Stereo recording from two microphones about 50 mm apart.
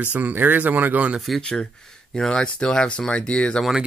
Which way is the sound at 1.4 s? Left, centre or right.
Centre.